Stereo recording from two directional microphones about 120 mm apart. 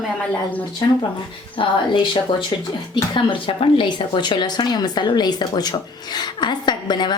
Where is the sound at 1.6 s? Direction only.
45° left (ahead or behind).